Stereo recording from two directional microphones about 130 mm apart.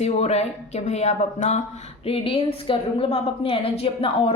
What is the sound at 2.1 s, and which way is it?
A woman's voice, 45° left (ahead or behind).